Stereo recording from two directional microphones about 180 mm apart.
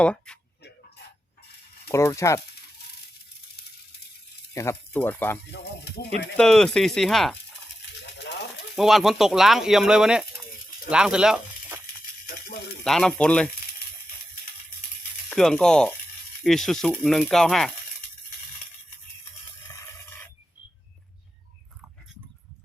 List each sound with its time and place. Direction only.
0.0 s speech: 5° left (ahead or behind)
1.9 s speech: 15° left (ahead or behind)
4.5 s speech: 15° left (ahead or behind)
5.5 s speech: 65° left (ahead or behind)
6.3 s speech: 5° left (ahead or behind)
8.2 s a sound: 70° left (ahead or behind)
8.7 s speech: centre (ahead or behind)
12.2 s a sound: 55° left (ahead or behind)
12.8 s speech: 5° left (ahead or behind)
15.3 s speech: 5° left (ahead or behind)